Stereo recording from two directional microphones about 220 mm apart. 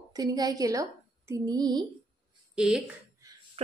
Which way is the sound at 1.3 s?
15° right (ahead or behind).